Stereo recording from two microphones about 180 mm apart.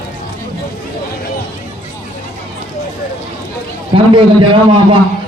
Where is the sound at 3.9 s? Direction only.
30° right (ahead or behind).